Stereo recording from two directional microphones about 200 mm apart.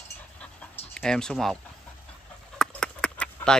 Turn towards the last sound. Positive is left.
turn(degrees=5)  # may be behind; listen again after turning